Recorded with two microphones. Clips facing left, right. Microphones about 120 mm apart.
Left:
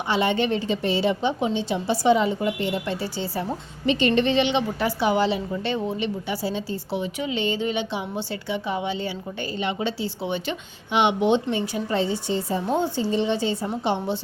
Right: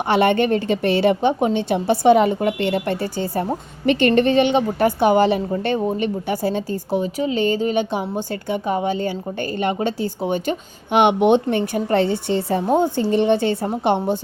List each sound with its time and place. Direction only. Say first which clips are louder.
0.1 s a woman's voice: right 6 dB; 60° right (ahead or behind)
12.6 s a woman's voice: right 6 dB; 45° right (ahead or behind)